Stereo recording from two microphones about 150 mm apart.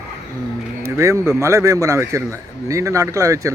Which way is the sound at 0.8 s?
20° right (ahead or behind).